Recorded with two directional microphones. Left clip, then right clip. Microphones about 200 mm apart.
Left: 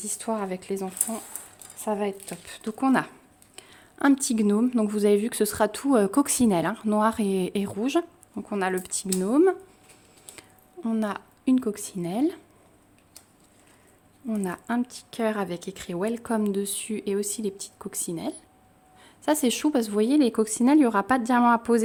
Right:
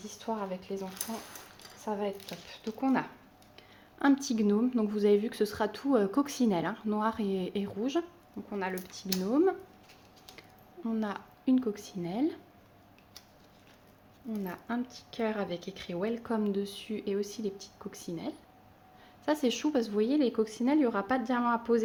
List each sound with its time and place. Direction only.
0.0 s speech: 65° left (ahead or behind)
3.5 s speech: 40° left (ahead or behind)
8.4 s speech: 50° left (ahead or behind)
9.2 s speech: 40° left (ahead or behind)
10.8 s speech: 35° left (ahead or behind)
14.3 s speech: 50° left (ahead or behind)